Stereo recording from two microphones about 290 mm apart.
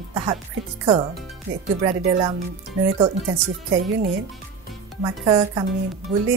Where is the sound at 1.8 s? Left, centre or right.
Centre.